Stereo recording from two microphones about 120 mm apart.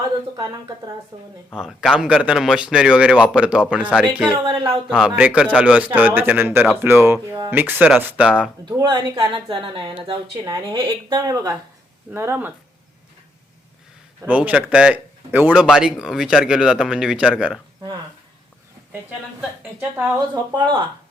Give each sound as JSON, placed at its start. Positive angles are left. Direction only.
{"t": 1.1, "sound": "speech", "side_deg": -30}
{"t": 1.5, "sound": "speech", "side_deg": -5}
{"t": 4.4, "sound": "speech", "side_deg": -45}
{"t": 4.9, "sound": "speech", "side_deg": -5}
{"t": 8.8, "sound": "speech", "side_deg": -40}
{"t": 10.4, "sound": "speech", "side_deg": -35}
{"t": 12.1, "sound": "speech", "side_deg": -20}
{"t": 14.3, "sound": "speech", "side_deg": -10}
{"t": 20.3, "sound": "speech", "side_deg": -35}